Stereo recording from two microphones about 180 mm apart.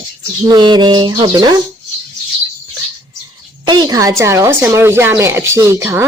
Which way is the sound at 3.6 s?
20° right (ahead or behind).